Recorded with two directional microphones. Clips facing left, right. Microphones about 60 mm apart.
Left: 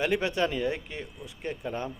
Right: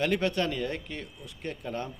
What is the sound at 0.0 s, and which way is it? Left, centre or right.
Speech, centre.